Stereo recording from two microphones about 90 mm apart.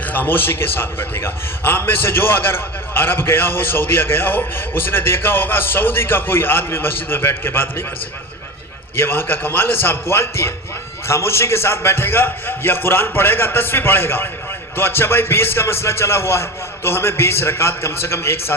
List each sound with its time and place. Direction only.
0.0 s a man's voice: 20° left (ahead or behind)
9.0 s a man's voice: 25° left (ahead or behind)